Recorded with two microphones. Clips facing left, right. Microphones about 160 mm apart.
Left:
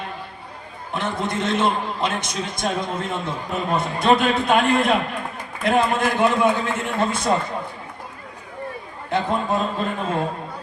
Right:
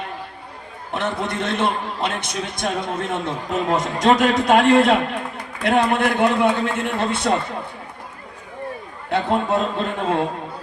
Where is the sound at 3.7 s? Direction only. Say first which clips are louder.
Right 1 dB; 90° right; by 6.5 s 65° right (ahead or behind).